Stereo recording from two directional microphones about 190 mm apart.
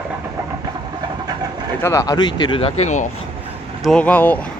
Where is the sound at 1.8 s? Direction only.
15° left (ahead or behind); by 3.1 s 40° left (ahead or behind).